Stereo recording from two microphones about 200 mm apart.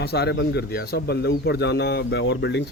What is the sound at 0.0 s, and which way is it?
Speech, 55° left (ahead or behind).